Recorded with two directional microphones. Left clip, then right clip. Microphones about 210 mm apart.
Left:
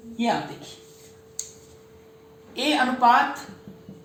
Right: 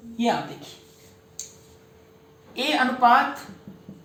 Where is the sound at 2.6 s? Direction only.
25° left (ahead or behind).